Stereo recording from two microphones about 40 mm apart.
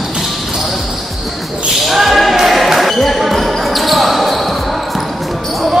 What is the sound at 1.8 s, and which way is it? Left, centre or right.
Basketball bounce, centre.